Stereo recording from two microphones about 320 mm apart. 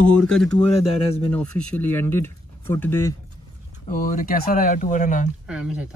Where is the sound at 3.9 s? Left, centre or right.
Left.